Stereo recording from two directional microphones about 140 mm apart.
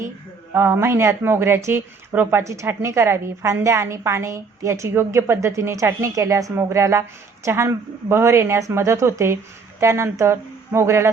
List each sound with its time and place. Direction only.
0.5 s speech: 20° right (ahead or behind)